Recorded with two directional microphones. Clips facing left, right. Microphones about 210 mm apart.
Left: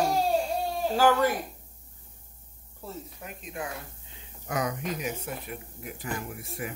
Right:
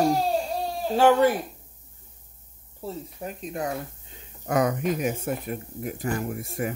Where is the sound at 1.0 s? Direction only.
25° right (ahead or behind).